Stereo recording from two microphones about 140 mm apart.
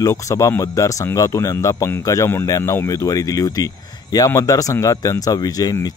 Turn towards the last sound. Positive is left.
turn(degrees=25)  # may be behind; listen again after turning